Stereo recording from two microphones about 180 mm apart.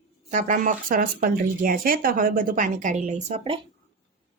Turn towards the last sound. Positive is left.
turn(degrees=-35)  # may be behind; listen again after turning